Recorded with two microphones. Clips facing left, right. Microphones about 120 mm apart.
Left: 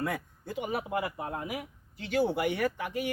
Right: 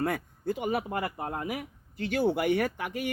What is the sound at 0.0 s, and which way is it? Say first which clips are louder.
Speech: right 4 dB; 50° right (ahead or behind).